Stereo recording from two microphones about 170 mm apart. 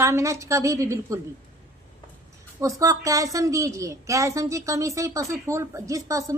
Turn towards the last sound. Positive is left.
turn(degrees=-20)  # may be behind; listen again after turning